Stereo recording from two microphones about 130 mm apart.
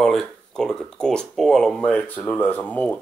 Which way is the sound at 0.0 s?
5° left (ahead or behind).